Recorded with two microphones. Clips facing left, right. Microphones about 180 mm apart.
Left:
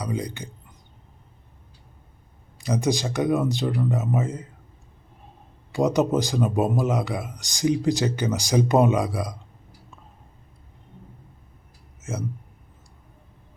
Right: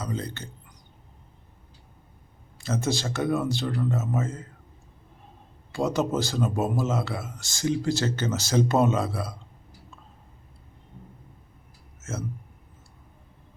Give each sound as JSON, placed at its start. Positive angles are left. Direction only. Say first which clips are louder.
{"t": 0.0, "sound": "a man's voice", "louder": "left 3 dB", "side_deg": 15}
{"t": 2.6, "sound": "a man's voice", "louder": "left 4 dB", "side_deg": 15}
{"t": 5.7, "sound": "a man's voice", "louder": "left 4 dB", "side_deg": 15}
{"t": 11.9, "sound": "a sound", "louder": "left 3 dB", "side_deg": 15}